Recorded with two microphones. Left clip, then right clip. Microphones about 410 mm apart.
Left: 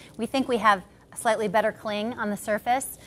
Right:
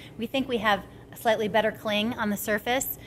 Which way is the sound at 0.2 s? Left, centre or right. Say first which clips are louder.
Left 4 dB; left.